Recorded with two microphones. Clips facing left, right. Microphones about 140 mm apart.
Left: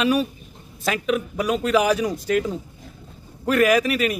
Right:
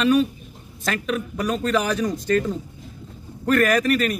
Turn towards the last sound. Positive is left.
turn(degrees=5)  # may be behind; listen again after turning